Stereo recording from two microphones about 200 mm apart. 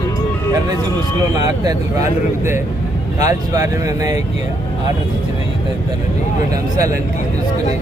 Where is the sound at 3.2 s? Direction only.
15° right (ahead or behind).